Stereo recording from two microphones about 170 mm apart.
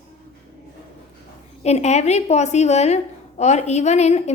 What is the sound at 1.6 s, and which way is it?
A woman's voice, 40° left (ahead or behind).